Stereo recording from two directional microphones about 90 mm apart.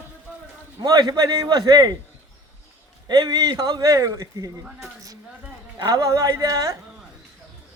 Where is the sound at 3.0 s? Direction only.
50° right (ahead or behind).